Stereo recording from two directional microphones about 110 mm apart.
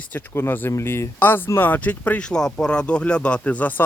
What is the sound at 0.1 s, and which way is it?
Speech, 20° left (ahead or behind).